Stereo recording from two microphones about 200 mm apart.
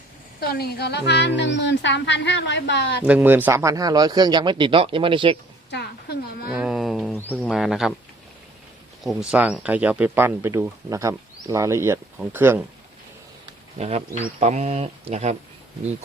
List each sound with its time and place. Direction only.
0.3 s speech: 50° left (ahead or behind)
3.0 s speech: 10° right (ahead or behind); by 5.4 s 25° right (ahead or behind)
5.7 s a sound: 55° left (ahead or behind)
6.5 s a sound: 5° right (ahead or behind)
7.2 s speech: 10° left (ahead or behind)
7.5 s speech: centre (ahead or behind)
9.3 s speech: 5° right (ahead or behind)
13.7 s speech: 30° right (ahead or behind)